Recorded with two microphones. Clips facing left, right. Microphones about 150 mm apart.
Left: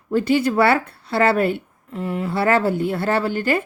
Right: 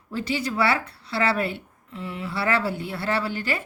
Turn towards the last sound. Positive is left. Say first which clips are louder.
# left 7 dB
turn(degrees=50)  # may be behind; listen again after turning